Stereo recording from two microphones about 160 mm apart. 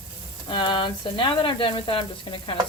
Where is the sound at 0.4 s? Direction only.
30° left (ahead or behind).